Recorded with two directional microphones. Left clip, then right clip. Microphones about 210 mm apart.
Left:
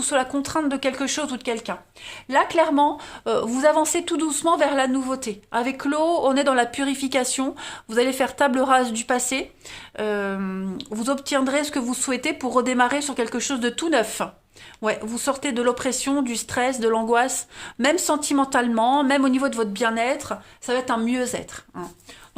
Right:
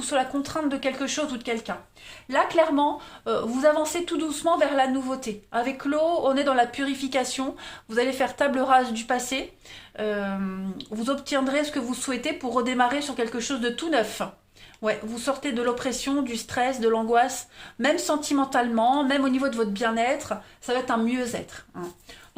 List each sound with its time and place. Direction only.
0.0 s a woman's voice: 50° left (ahead or behind)
2.3 s a woman's voice: 30° left (ahead or behind)